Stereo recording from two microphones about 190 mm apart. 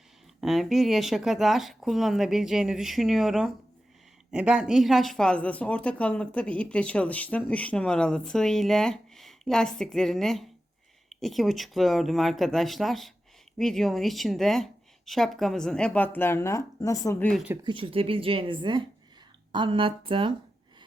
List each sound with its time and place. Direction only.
0.4 s speech: centre (ahead or behind)
17.6 s a woman's voice: 25° right (ahead or behind)